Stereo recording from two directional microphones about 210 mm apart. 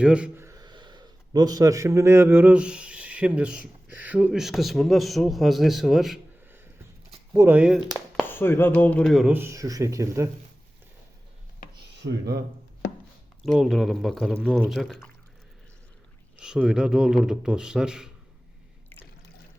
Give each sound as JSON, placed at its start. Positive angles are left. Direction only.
{"t": 0.0, "sound": "speech", "side_deg": -5}
{"t": 8.3, "sound": "speech", "side_deg": 10}
{"t": 12.0, "sound": "speech", "side_deg": -50}
{"t": 13.4, "sound": "speech", "side_deg": 0}
{"t": 16.4, "sound": "speech", "side_deg": -5}